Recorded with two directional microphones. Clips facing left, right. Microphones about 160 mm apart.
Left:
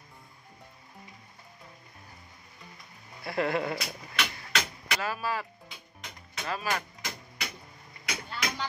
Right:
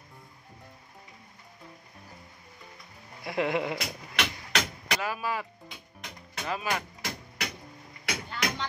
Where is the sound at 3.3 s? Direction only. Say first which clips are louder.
Right 1 dB; 10° right (ahead or behind).